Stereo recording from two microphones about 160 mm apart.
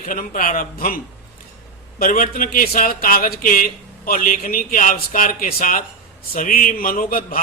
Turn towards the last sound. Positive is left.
turn(degrees=60)  # may be behind; listen again after turning